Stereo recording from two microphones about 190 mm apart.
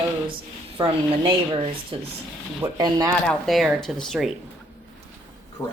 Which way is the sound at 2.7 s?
20° right (ahead or behind).